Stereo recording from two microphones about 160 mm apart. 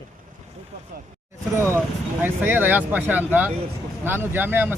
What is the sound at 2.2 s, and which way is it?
Speech, 10° right (ahead or behind).